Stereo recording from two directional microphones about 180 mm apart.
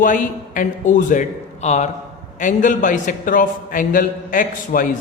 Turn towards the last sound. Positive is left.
turn(degrees=50)  # may be behind; listen again after turning